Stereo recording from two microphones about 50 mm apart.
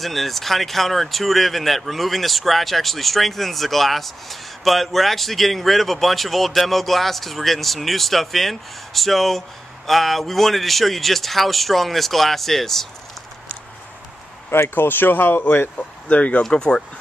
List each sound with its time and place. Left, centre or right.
0.0 s speech: centre
14.5 s speech: left
16.1 s speech: left
16.4 s speech: centre